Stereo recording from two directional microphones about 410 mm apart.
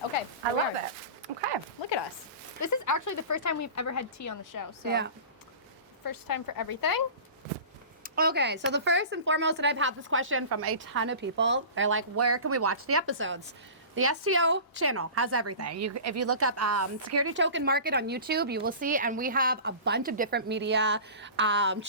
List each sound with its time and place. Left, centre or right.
2.6 s speech: left
4.9 s speech: right
6.1 s speech: left
8.0 s a woman's voice: right